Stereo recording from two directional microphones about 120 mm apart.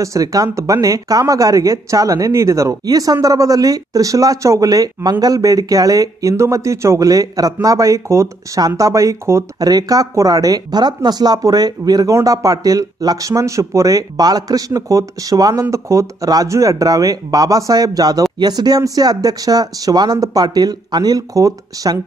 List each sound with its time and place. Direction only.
0.0 s speech: 30° right (ahead or behind)